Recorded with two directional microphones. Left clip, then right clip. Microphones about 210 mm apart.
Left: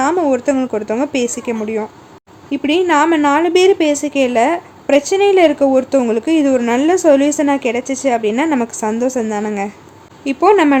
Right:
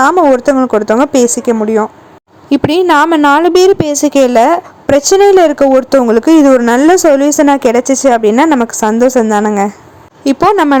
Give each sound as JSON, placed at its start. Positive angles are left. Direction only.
{"t": 0.1, "sound": "a woman's voice", "side_deg": -25}
{"t": 10.2, "sound": "a woman's voice", "side_deg": -30}